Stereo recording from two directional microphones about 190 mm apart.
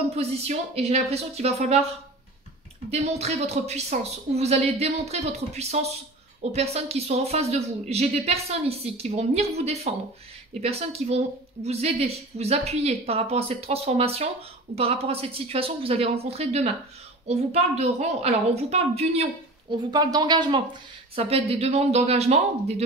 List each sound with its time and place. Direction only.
0.1 s a woman's voice: 35° right (ahead or behind)
2.9 s a woman's voice: 35° right (ahead or behind)
19.9 s a woman's voice: 20° right (ahead or behind)